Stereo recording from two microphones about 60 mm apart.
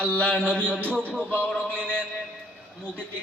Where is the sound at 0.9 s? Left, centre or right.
Left.